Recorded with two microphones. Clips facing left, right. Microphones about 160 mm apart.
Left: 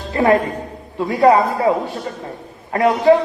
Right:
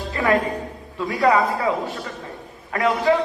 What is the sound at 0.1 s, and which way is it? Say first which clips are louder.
A man's voice: left 5 dB; 30° left (ahead or behind).